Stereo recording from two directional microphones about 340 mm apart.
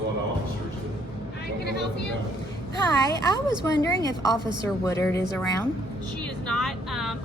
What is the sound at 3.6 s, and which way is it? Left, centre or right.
A woman's voice, centre.